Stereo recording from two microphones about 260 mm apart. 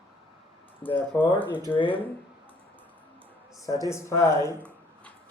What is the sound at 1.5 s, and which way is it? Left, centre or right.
Speech, centre.